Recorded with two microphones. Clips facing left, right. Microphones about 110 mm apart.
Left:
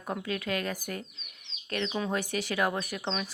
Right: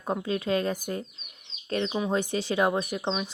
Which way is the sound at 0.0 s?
25° right (ahead or behind).